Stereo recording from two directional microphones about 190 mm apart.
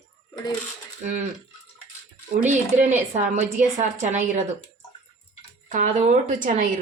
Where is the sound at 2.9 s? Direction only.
35° right (ahead or behind).